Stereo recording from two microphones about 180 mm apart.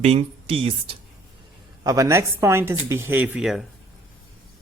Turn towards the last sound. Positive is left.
turn(degrees=0)  # may be behind; listen again after turning